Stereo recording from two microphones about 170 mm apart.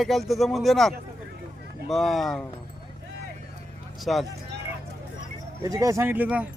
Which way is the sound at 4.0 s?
Centre (ahead or behind).